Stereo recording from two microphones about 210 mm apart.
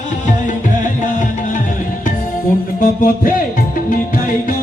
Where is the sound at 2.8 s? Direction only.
45° left (ahead or behind).